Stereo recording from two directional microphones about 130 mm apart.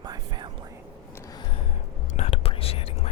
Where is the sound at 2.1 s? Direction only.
50° left (ahead or behind).